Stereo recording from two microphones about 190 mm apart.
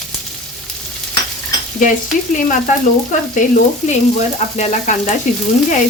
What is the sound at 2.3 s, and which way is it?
Speech, 45° left (ahead or behind).